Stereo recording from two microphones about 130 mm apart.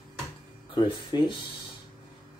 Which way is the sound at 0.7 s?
35° left (ahead or behind).